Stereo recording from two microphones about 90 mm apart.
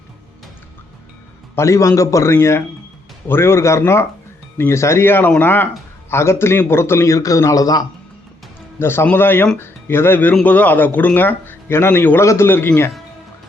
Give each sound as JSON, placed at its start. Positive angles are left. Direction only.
{"t": 1.5, "sound": "a man's voice", "side_deg": 35}
{"t": 8.8, "sound": "a man's voice", "side_deg": 25}